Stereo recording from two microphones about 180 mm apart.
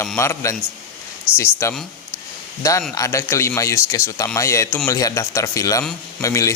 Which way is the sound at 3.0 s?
15° left (ahead or behind).